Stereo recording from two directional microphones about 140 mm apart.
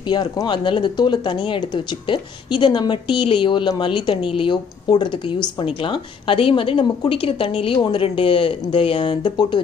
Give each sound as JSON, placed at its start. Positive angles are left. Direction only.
{"t": 0.0, "sound": "speech", "side_deg": 35}